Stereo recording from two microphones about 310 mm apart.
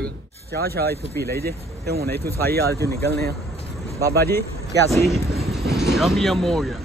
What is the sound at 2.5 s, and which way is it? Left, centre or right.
Speech, right.